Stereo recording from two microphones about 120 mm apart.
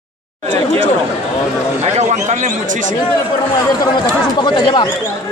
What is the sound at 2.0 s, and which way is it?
Speech, 75° right (ahead or behind).